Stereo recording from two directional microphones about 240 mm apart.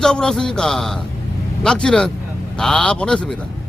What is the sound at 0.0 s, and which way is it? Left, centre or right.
Speech, centre.